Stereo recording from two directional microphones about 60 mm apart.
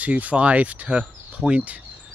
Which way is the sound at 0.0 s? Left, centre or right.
Right.